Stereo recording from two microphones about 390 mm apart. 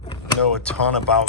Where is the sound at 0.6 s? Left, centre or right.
Centre.